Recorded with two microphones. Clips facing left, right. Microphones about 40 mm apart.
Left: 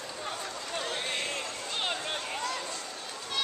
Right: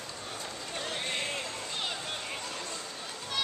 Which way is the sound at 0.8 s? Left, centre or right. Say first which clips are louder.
Left 1 dB; centre.